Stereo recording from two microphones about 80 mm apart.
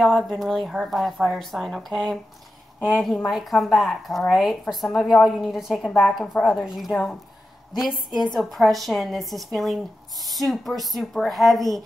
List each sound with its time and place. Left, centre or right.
0.0 s speech: centre
3.3 s speech: centre
5.9 s speech: centre